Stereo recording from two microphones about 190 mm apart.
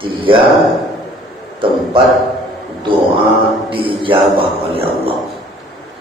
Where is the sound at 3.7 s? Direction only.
25° right (ahead or behind).